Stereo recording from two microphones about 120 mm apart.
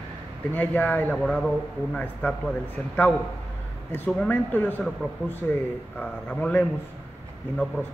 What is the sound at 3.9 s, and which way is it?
Speech, 15° left (ahead or behind).